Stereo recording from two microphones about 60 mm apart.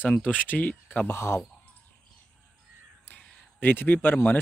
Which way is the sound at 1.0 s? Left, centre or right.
Left.